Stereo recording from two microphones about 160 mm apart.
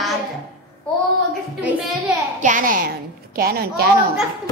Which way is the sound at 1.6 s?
5° right (ahead or behind).